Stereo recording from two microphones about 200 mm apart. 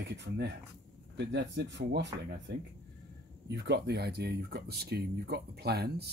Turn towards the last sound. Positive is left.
turn(degrees=-55)  # may be behind; listen again after turning